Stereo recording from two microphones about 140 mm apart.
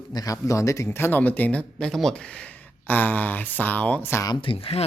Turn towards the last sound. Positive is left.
turn(degrees=40)  # may be behind; listen again after turning